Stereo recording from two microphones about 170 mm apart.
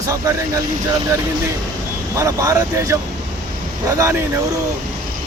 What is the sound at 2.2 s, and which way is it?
Speech, 20° right (ahead or behind).